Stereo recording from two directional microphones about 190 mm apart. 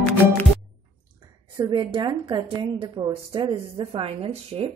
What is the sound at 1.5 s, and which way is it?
A woman's voice, 25° right (ahead or behind).